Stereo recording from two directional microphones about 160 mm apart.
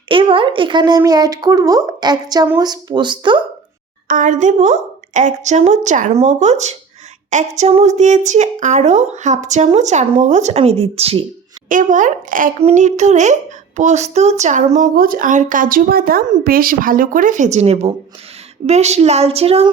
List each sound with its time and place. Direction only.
0.1 s speech: 35° right (ahead or behind)
4.1 s speech: 55° right (ahead or behind); by 11.3 s 40° right (ahead or behind)
11.7 s speech: 50° right (ahead or behind)
12.5 s a woman's voice: 45° right (ahead or behind)